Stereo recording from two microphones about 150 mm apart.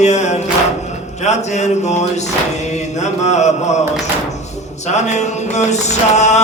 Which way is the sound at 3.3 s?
50° left (ahead or behind).